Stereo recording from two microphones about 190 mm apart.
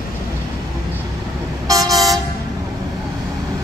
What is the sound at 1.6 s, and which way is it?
Toot, 20° right (ahead or behind).